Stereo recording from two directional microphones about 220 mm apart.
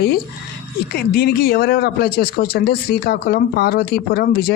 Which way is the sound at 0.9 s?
45° left (ahead or behind).